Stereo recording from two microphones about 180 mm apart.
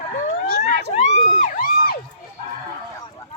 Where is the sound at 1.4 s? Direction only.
45° left (ahead or behind).